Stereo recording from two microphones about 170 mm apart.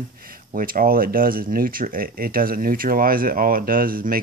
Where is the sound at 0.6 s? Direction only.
55° right (ahead or behind).